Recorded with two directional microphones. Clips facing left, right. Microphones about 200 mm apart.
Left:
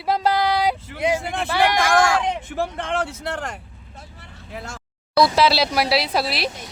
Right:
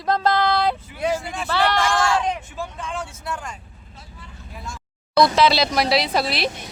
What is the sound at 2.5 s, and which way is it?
Speech, 70° left (ahead or behind).